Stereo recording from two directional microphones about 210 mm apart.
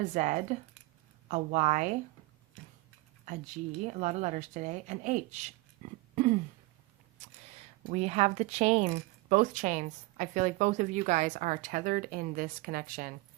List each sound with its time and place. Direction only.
0.0 s speech: 35° right (ahead or behind)
3.2 s speech: 35° right (ahead or behind)
6.2 s throat clearing: 35° right (ahead or behind)
7.9 s speech: 30° right (ahead or behind)